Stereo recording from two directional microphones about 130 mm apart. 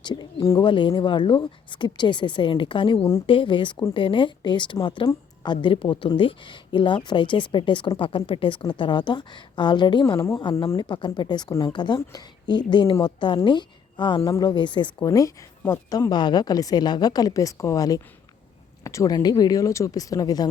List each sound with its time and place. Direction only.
0.0 s speech: 35° left (ahead or behind)
15.0 s speech: 25° left (ahead or behind)
16.0 s speech: 35° left (ahead or behind)